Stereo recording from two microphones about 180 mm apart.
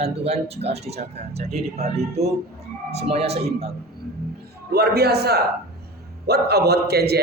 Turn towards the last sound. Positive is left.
turn(degrees=-60)  # may be behind; listen again after turning